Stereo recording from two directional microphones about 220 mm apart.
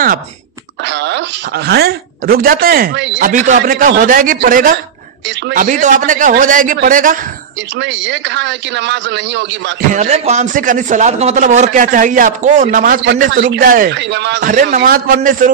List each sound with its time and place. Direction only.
0.8 s speech: 55° right (ahead or behind)
3.3 s a man's voice: 35° right (ahead or behind)
7.8 s a man's voice: 55° right (ahead or behind)
9.9 s a man's voice: 30° right (ahead or behind)
13.3 s a man's voice: 50° right (ahead or behind)
14.5 s a man's voice: 35° right (ahead or behind)
14.8 s a man's voice: 45° right (ahead or behind)